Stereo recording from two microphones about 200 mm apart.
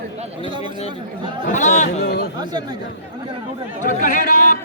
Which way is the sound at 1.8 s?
55° left (ahead or behind).